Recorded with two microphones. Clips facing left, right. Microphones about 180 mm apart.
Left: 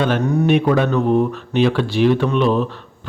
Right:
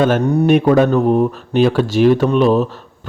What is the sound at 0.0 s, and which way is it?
Speech, 40° right (ahead or behind).